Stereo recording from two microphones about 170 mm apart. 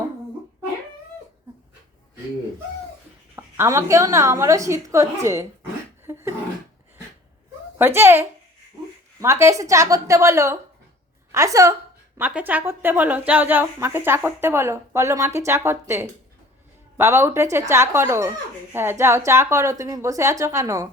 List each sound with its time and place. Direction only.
3.3 s a woman's voice: 15° right (ahead or behind)
6.1 s a sound: 15° right (ahead or behind)
7.8 s a woman's voice: 15° right (ahead or behind)